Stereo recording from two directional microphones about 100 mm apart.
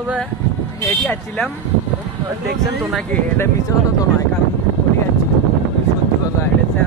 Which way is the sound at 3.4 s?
35° left (ahead or behind).